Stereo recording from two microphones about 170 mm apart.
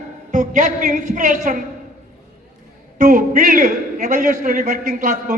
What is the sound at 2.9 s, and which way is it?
A man's voice, 50° right (ahead or behind).